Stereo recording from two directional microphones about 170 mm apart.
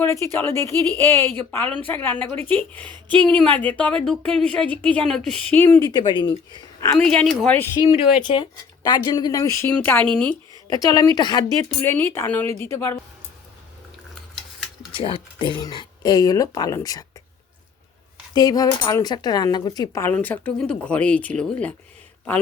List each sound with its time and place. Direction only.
0.0 s speech: 15° left (ahead or behind)
5.9 s speech: 25° left (ahead or behind)
7.0 s speech: 5° left (ahead or behind)
7.9 s speech: 30° left (ahead or behind); by 10.3 s 5° left (ahead or behind)
10.7 s speech: 20° left (ahead or behind)
14.9 s speech: 30° left (ahead or behind)
18.3 s speech: 20° left (ahead or behind)